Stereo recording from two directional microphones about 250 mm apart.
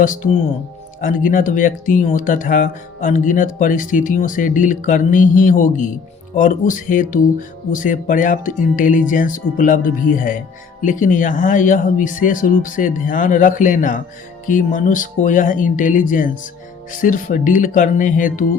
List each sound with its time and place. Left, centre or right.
0.0 s speech: left